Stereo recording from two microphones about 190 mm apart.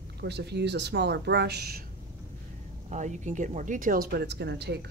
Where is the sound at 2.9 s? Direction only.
40° right (ahead or behind); by 4.8 s 60° right (ahead or behind).